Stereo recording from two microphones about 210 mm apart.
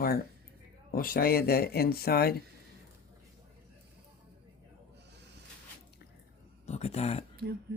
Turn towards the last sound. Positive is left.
turn(degrees=30)  # may be behind; listen again after turning